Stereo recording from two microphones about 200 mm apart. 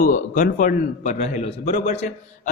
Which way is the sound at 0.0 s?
40° left (ahead or behind).